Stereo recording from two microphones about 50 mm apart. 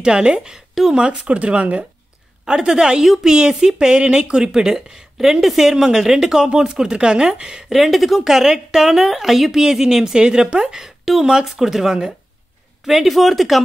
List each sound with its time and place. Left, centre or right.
0.0 s a woman's voice: centre
1.0 s speech: right
2.4 s a woman's voice: centre
7.7 s a woman's voice: centre